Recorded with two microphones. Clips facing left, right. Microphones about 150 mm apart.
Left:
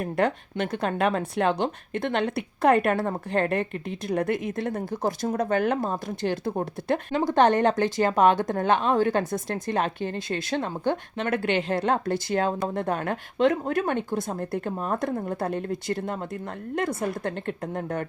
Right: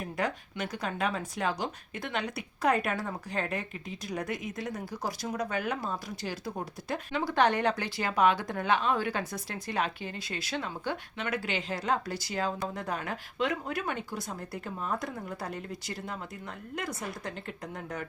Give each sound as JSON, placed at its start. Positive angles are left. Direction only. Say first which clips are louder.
{"t": 0.0, "sound": "speech", "louder": "left 8 dB", "side_deg": 55}